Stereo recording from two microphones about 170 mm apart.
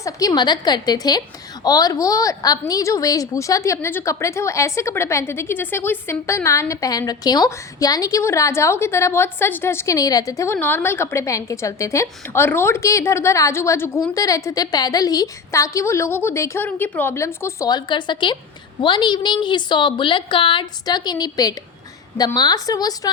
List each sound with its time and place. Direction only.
0.0 s a woman's voice: 20° left (ahead or behind)